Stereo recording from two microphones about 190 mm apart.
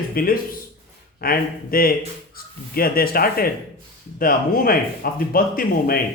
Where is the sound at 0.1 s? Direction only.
50° left (ahead or behind).